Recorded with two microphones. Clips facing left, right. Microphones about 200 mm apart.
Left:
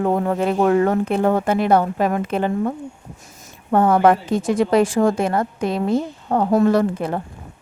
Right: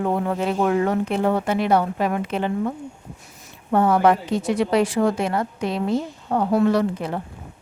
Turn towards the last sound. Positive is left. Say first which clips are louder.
# left 3 dB
turn(degrees=50)  # may be behind; listen again after turning